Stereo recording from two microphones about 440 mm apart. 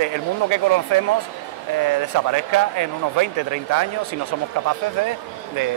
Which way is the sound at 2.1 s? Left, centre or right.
Right.